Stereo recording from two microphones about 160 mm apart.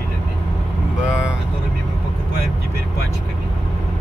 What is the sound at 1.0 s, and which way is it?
Vehicle, 5° right (ahead or behind).